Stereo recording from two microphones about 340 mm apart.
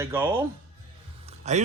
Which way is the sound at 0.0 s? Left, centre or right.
Centre.